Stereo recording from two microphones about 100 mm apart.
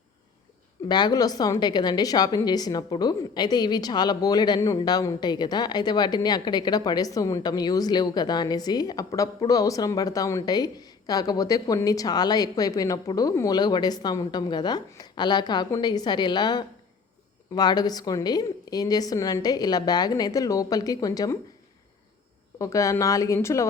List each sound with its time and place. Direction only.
0.9 s a woman's voice: 45° left (ahead or behind)
22.5 s a woman's voice: 35° left (ahead or behind)